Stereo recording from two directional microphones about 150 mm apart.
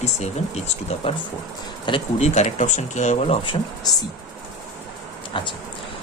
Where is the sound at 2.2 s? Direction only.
50° left (ahead or behind).